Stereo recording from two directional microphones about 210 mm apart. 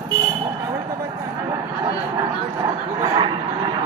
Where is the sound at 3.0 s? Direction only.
20° right (ahead or behind).